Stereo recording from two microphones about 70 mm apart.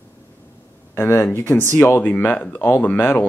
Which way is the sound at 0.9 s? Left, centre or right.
Left.